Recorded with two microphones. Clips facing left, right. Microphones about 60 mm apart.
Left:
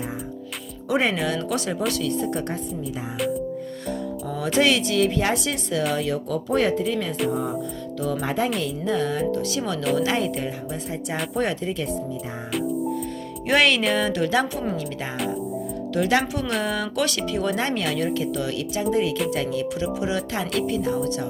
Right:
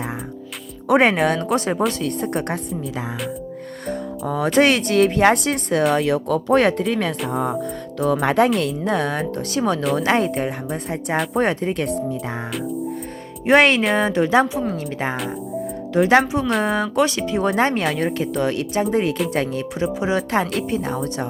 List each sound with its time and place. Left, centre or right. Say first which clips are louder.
0.9 s speech: right 7 dB; right
1.5 s speech: right 5 dB; right
2.0 s speech: right 2 dB; right
4.3 s speech: right 5 dB; right
5.9 s speech: right 6 dB; right
8.5 s speech: right 4 dB; right
11.3 s speech: right 3 dB; right
13.4 s speech: right 5 dB; right
15.9 s speech: right 6 dB; right